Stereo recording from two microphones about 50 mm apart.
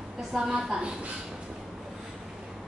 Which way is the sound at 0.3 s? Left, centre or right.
Centre.